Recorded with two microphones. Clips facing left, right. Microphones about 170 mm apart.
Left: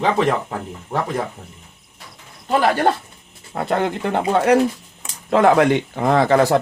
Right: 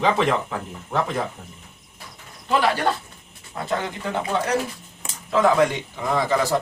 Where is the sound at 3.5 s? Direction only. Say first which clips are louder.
Left 6 dB; 60° left (ahead or behind).